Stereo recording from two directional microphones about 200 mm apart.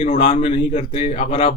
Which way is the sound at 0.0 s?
30° left (ahead or behind).